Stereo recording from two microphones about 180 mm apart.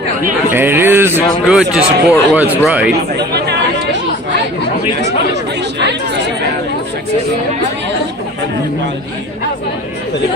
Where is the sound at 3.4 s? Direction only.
75° right (ahead or behind).